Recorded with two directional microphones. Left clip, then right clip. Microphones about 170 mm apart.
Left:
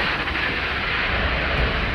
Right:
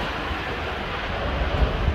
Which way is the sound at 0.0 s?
85° right.